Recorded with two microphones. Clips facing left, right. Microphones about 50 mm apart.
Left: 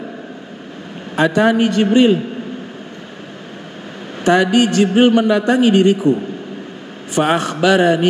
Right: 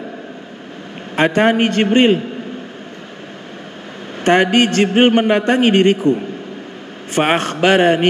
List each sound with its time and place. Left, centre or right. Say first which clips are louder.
1.1 s a man's voice: even; right
4.2 s a man's voice: even; right
7.2 s a man's voice: even; right